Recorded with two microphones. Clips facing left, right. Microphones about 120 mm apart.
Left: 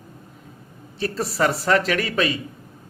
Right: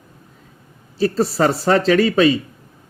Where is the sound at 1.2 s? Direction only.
30° right (ahead or behind).